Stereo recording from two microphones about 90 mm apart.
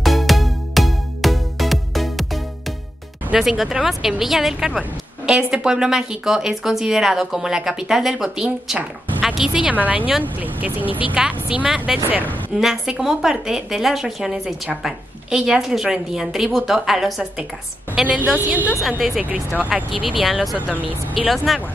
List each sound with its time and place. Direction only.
0.0 s music: centre (ahead or behind)
3.3 s a woman's voice: 5° right (ahead or behind); by 10.9 s 20° right (ahead or behind)
11.1 s speech: 10° right (ahead or behind)
21.5 s speech: centre (ahead or behind)